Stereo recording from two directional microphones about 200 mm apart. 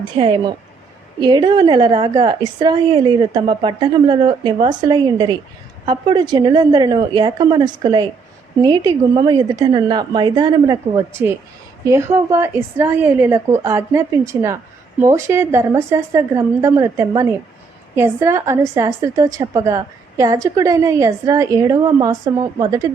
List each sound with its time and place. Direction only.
0.2 s a woman's voice: 20° right (ahead or behind)